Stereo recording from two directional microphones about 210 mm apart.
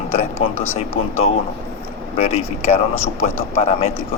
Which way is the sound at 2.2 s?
30° left (ahead or behind).